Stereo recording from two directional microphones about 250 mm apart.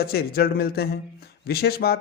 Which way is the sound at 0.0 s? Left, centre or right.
Left.